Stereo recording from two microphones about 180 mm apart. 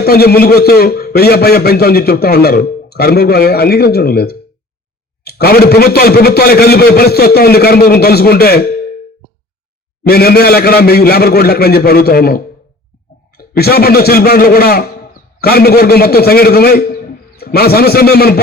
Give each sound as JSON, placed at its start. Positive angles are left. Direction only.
{"t": 0.0, "sound": "a man's voice", "side_deg": 60}
{"t": 10.0, "sound": "a man's voice", "side_deg": 60}